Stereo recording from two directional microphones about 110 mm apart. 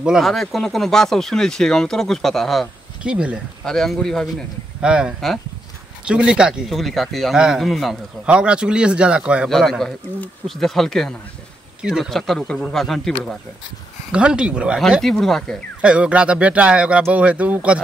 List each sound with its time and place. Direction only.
0.0 s speech: centre (ahead or behind)
3.0 s speech: 10° right (ahead or behind)
3.6 s speech: 5° left (ahead or behind)
4.8 s a man's voice: 10° right (ahead or behind)
9.5 s speech: centre (ahead or behind)
14.1 s a man's voice: 10° right (ahead or behind)
14.8 s speech: centre (ahead or behind)
15.8 s a man's voice: 10° right (ahead or behind)